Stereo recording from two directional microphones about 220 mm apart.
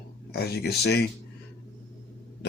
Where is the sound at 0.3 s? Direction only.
45° left (ahead or behind).